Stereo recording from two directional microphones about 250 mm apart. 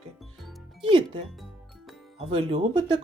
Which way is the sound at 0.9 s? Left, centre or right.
Centre.